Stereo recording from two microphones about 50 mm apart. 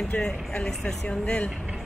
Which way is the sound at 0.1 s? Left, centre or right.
Left.